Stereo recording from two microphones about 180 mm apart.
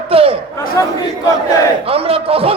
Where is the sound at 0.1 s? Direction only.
30° right (ahead or behind).